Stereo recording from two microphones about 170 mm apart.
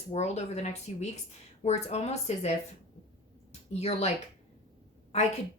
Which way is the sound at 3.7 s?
40° left (ahead or behind).